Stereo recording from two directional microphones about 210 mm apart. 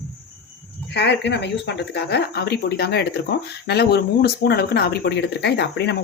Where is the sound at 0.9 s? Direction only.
55° left (ahead or behind).